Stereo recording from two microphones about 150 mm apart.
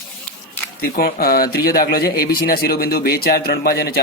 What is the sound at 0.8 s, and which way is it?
A man's voice, 85° left.